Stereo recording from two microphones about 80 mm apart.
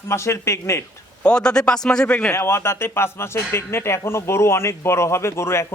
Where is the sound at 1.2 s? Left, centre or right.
Centre.